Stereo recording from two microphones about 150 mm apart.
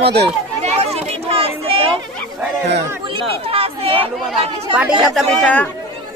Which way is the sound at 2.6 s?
40° right (ahead or behind).